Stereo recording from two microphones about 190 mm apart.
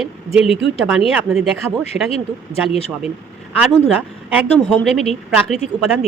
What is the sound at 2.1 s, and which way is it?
Speech, 30° left (ahead or behind).